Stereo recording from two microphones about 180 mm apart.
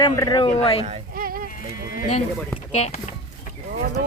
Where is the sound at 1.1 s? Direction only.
50° right (ahead or behind).